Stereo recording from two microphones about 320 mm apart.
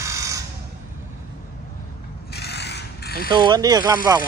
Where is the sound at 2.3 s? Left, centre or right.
Left.